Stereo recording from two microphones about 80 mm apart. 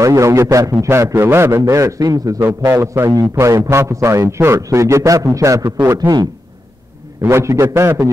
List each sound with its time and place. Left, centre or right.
0.0 s a man's voice: right
2.4 s a man's voice: right
5.9 s speech: right
7.2 s a man's voice: right